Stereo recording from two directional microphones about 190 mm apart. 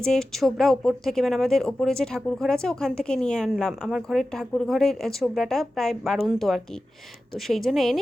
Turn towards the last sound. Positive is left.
turn(degrees=0)  # may be behind; listen again after turning